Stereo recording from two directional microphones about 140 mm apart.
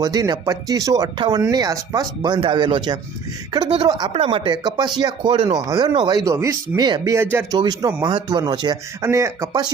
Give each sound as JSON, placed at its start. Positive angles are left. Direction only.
{"t": 0.0, "sound": "speech", "side_deg": -25}
{"t": 4.1, "sound": "speech", "side_deg": -40}
{"t": 7.6, "sound": "speech", "side_deg": -30}
{"t": 9.0, "sound": "speech", "side_deg": -20}